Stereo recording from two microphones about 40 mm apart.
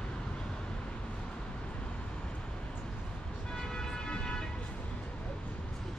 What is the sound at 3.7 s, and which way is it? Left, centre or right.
Vehicle, centre.